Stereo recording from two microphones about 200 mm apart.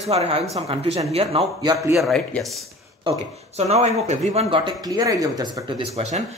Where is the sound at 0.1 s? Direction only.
30° right (ahead or behind).